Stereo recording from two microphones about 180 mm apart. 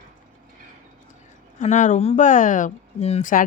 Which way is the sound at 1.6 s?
40° left (ahead or behind).